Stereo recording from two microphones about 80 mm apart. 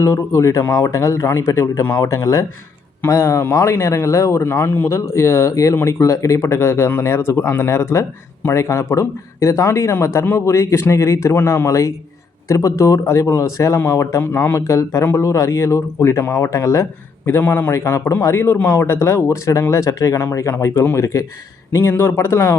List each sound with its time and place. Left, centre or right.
0.0 s speech: left
14.6 s speech: left
16.2 s speech: left
16.5 s speech: left
17.4 s speech: left
17.7 s speech: left